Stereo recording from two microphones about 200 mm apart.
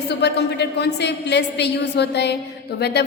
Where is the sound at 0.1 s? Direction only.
55° left (ahead or behind).